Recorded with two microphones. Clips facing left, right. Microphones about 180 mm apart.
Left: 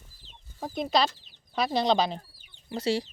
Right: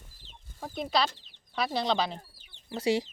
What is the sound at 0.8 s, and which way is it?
Speech, 20° left (ahead or behind).